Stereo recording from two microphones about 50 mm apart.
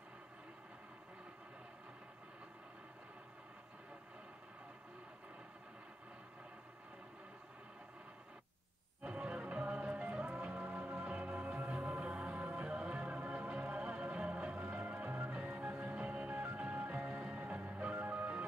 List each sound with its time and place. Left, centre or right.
9.0 s music: right